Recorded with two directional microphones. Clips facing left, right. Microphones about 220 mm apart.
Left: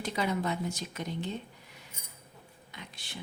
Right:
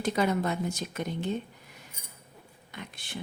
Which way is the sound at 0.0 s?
50° right (ahead or behind).